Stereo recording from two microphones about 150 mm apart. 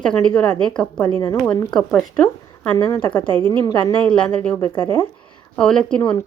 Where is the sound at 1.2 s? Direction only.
25° left (ahead or behind).